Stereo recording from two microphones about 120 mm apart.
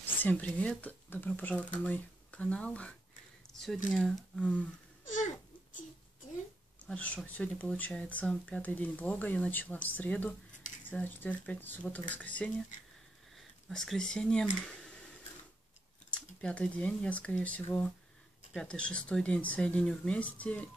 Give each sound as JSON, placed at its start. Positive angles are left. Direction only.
{"t": 0.0, "sound": "speech", "side_deg": 15}
{"t": 5.0, "sound": "a sound", "side_deg": 90}
{"t": 6.9, "sound": "speech", "side_deg": 10}
{"t": 13.4, "sound": "speech", "side_deg": 0}
{"t": 16.1, "sound": "speech", "side_deg": 10}